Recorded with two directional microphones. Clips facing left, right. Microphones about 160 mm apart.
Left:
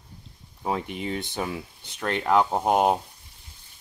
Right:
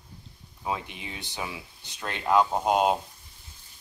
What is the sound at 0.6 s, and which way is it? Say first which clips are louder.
Speech: left 5 dB; 50° left (ahead or behind).